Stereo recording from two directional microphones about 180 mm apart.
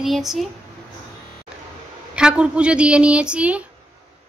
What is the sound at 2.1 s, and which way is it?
Speech, 5° right (ahead or behind).